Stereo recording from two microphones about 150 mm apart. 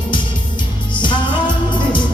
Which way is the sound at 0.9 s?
30° left (ahead or behind).